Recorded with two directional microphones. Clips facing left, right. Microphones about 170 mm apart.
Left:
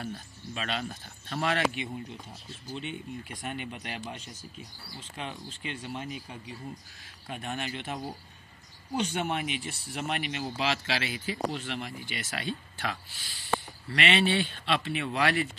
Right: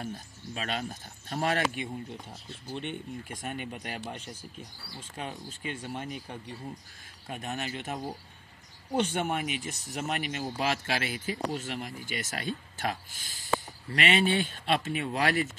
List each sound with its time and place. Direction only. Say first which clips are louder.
0.6 s speech: even; 45° right (ahead or behind)
2.7 s speech: right 1 dB; 55° right (ahead or behind)
4.0 s speech: right 1 dB; 55° right (ahead or behind)
5.1 s speech: right 1 dB; 45° right (ahead or behind)